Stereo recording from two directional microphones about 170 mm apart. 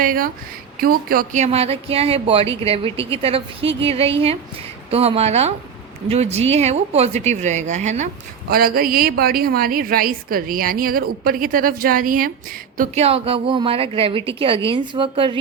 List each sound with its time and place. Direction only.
0.0 s speech: 55° right (ahead or behind)
8.4 s a woman's voice: 60° right (ahead or behind); by 15.4 s 30° right (ahead or behind)